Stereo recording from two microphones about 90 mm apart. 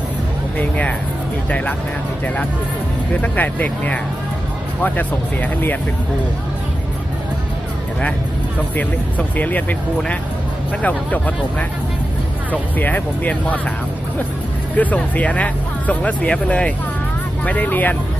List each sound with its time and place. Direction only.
1.5 s speech: 15° left (ahead or behind)
8.7 s speech: 15° left (ahead or behind)
10.8 s speech: 15° left (ahead or behind)
12.5 s speech: 20° left (ahead or behind)
14.8 s speech: 15° left (ahead or behind)